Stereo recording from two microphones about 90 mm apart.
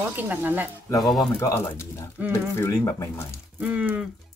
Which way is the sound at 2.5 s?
35° left (ahead or behind).